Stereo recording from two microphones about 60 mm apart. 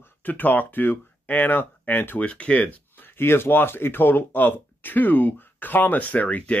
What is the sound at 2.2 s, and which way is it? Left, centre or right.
Speech, centre.